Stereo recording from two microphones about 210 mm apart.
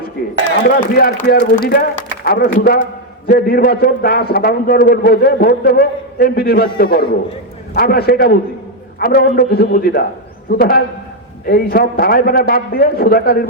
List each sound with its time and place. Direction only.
0.7 s a man's voice: 45° left (ahead or behind)